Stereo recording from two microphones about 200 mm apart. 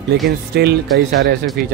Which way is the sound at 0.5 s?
55° right (ahead or behind).